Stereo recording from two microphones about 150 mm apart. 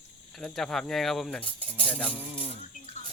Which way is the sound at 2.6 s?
50° left (ahead or behind).